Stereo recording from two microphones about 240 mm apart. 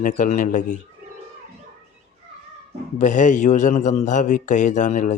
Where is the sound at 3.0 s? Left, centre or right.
Left.